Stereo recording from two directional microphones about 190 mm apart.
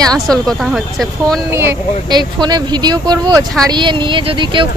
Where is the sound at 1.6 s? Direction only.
15° right (ahead or behind).